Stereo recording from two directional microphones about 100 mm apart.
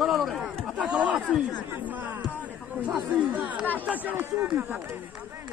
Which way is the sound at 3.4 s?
15° right (ahead or behind).